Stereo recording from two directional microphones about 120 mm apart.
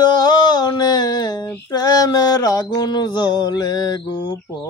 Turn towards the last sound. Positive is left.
turn(degrees=20)  # may be behind; listen again after turning